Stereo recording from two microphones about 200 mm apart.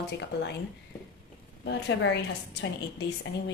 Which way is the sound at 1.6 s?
60° left (ahead or behind).